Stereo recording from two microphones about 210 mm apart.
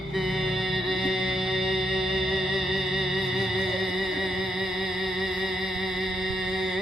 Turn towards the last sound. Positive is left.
turn(degrees=0)  # may be behind; listen again after turning